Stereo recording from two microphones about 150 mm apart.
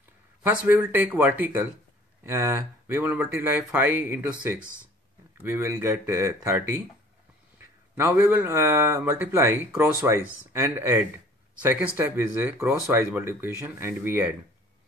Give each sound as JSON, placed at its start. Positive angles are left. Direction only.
{"t": 0.4, "sound": "speech", "side_deg": -10}
{"t": 8.0, "sound": "speech", "side_deg": -15}